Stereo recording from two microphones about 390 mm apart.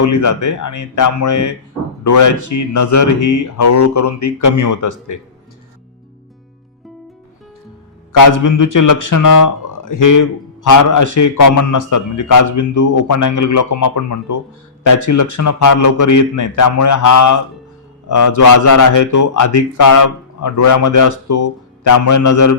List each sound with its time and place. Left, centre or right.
0.0 s speech: left
8.1 s speech: left